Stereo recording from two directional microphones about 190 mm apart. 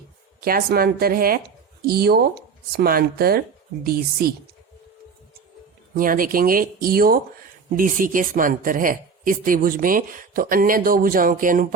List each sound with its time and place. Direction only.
0.3 s a woman's voice: 50° right (ahead or behind)
5.9 s a woman's voice: 45° right (ahead or behind)